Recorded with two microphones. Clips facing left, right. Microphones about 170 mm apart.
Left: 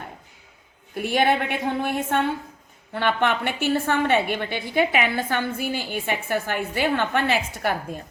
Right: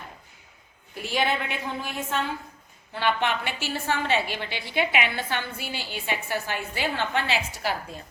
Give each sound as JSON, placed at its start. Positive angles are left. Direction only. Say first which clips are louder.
{"t": 0.9, "sound": "a woman's voice", "louder": "left 6 dB", "side_deg": 55}